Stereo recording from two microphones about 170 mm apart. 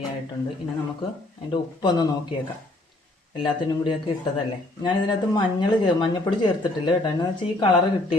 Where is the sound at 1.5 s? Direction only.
25° left (ahead or behind).